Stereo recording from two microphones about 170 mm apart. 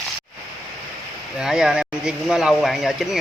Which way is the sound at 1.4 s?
5° right (ahead or behind).